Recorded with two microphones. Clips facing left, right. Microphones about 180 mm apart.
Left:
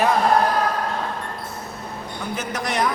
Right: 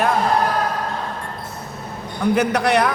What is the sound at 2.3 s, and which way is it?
Speech, 65° right (ahead or behind).